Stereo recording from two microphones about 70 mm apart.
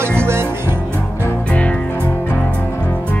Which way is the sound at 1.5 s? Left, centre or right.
Centre.